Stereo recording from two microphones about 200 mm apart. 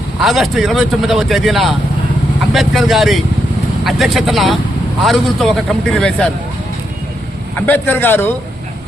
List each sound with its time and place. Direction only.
0.2 s speech: centre (ahead or behind)
7.7 s speech: 10° left (ahead or behind)